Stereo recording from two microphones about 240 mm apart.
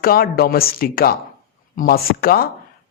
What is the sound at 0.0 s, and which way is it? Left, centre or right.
Speech, left.